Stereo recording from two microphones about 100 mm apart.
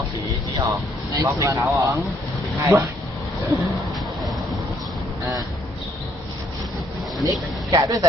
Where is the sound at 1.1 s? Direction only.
30° right (ahead or behind).